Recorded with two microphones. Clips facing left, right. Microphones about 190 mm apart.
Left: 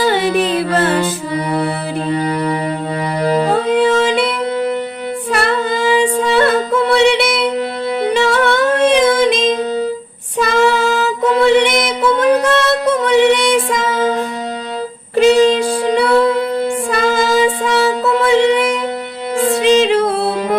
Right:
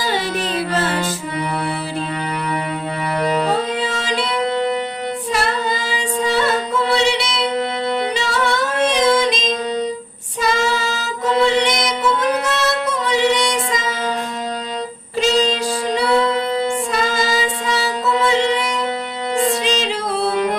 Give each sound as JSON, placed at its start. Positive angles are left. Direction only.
{"t": 0.0, "sound": "music", "side_deg": 60}
{"t": 2.1, "sound": "music", "side_deg": 35}
{"t": 3.5, "sound": "music", "side_deg": 55}
{"t": 5.3, "sound": "female singing", "side_deg": 60}
{"t": 8.1, "sound": "music", "side_deg": 55}
{"t": 10.3, "sound": "female singing", "side_deg": 60}
{"t": 12.5, "sound": "music", "side_deg": 55}
{"t": 15.1, "sound": "music", "side_deg": 60}
{"t": 19.6, "sound": "music", "side_deg": 55}